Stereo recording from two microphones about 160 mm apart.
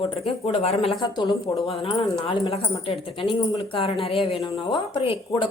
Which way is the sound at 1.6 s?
35° left (ahead or behind).